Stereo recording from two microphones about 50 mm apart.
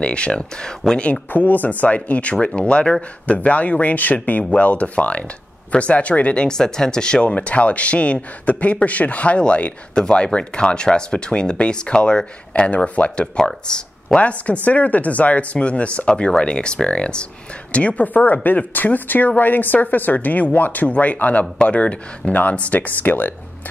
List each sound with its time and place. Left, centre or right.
0.0 s speech: left
1.3 s speech: left
13.4 s speech: centre
14.2 s speech: left